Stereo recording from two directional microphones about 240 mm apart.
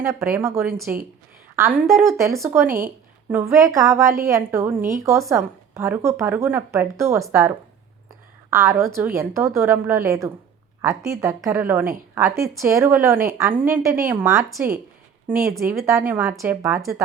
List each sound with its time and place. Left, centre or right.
0.0 s a woman's voice: centre
2.6 s speech: right
3.3 s a woman's voice: centre
8.4 s a woman's voice: centre